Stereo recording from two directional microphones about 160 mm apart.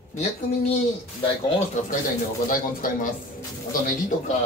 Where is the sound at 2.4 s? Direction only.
60° left (ahead or behind).